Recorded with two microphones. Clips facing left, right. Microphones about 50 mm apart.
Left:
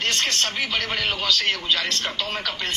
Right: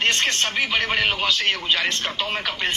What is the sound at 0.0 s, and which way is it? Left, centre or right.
Speech, right.